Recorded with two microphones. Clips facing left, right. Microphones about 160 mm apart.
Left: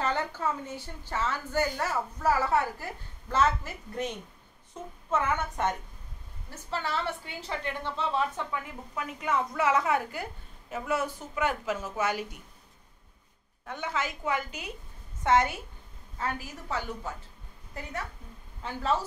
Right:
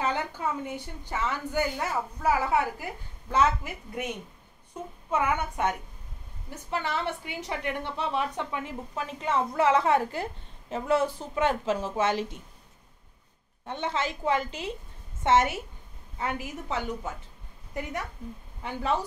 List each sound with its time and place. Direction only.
0.0 s a woman's voice: 15° right (ahead or behind)
5.1 s a woman's voice: 10° right (ahead or behind)
13.7 s a woman's voice: 30° right (ahead or behind)
18.6 s a woman's voice: 15° right (ahead or behind)